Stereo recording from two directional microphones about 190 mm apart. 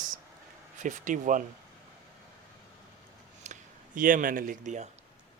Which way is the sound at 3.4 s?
40° right (ahead or behind).